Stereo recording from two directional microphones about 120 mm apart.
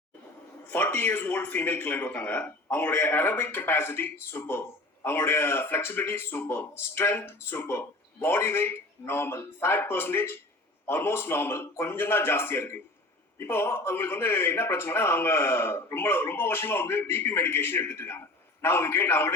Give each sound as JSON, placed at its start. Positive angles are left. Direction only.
{"t": 0.6, "sound": "a man's voice", "side_deg": 15}